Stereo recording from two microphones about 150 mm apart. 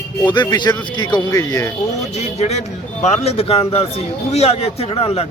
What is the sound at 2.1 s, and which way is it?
Speech, 50° left (ahead or behind).